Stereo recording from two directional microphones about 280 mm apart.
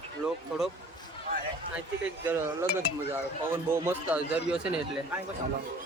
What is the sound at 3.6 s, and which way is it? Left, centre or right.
A man's voice, centre.